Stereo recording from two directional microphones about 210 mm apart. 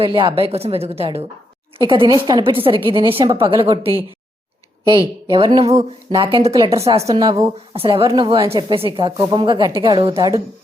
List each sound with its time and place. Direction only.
0.0 s a woman's voice: 25° right (ahead or behind)
10.2 s a woman's voice: 15° right (ahead or behind)